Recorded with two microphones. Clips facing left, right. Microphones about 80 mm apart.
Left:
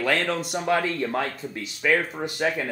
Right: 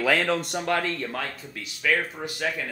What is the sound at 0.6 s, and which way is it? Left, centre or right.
Speech, centre.